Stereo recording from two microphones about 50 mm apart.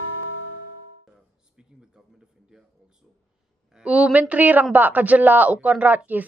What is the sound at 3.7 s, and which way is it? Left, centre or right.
Speech, right.